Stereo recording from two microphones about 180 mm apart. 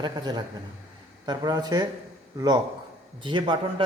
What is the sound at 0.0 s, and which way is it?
Speech, 25° right (ahead or behind).